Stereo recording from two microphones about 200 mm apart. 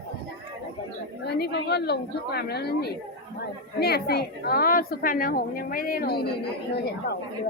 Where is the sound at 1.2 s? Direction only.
55° left (ahead or behind).